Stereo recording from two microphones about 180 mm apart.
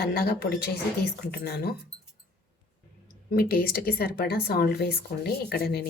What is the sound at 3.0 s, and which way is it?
A woman's voice, 55° left (ahead or behind).